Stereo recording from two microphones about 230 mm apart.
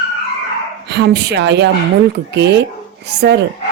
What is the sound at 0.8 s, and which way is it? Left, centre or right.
Speech, right.